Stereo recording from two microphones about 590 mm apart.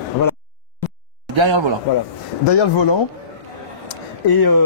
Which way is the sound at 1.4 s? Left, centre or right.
Right.